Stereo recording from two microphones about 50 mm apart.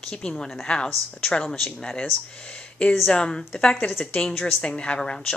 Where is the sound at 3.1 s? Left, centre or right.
Centre.